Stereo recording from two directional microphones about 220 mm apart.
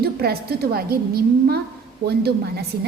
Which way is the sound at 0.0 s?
45° right (ahead or behind).